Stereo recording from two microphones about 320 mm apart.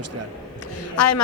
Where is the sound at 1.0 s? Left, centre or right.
Left.